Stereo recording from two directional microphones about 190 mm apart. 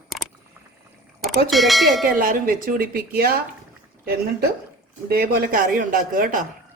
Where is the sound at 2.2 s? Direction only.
50° right (ahead or behind).